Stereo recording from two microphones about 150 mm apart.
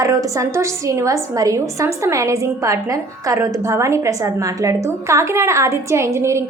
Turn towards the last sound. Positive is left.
turn(degrees=-20)  # may be behind; listen again after turning